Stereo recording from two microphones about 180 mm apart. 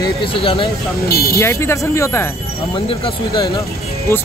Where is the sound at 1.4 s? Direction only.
15° left (ahead or behind).